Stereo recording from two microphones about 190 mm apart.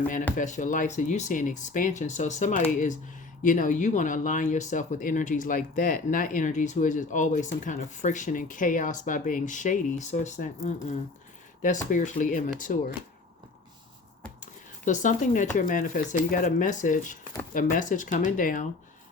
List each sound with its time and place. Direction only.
0.3 s speech: 40° left (ahead or behind)
14.4 s speech: 40° left (ahead or behind)